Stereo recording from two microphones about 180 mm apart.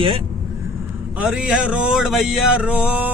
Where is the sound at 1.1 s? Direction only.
5° right (ahead or behind).